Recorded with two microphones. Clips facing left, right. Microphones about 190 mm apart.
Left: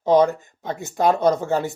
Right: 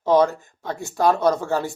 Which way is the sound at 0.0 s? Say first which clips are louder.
Left 1 dB; 20° left (ahead or behind).